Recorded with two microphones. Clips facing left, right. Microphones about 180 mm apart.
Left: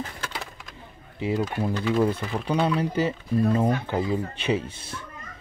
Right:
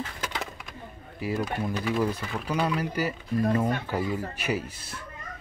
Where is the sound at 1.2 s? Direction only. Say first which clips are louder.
Left 3 dB; 25° left (ahead or behind).